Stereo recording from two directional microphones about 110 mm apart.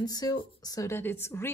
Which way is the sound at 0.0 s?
35° left (ahead or behind).